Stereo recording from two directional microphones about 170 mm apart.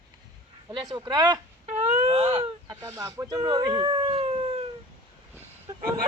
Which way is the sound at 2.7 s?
20° right (ahead or behind).